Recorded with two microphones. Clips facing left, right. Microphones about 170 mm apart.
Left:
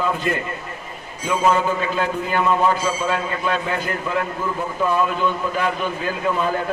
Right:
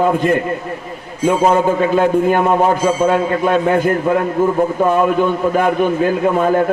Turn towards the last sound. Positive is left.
turn(degrees=-50)  # may be behind; listen again after turning